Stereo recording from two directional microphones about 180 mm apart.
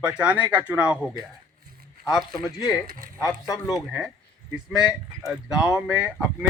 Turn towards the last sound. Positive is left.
turn(degrees=-5)  # may be behind; listen again after turning